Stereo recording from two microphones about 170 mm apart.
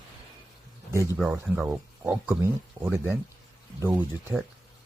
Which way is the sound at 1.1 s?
10° right (ahead or behind).